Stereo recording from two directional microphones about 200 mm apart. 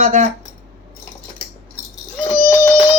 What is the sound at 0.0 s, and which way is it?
Speech, 40° right (ahead or behind).